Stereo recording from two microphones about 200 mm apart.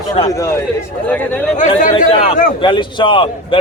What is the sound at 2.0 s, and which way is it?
A man's voice, 30° left (ahead or behind).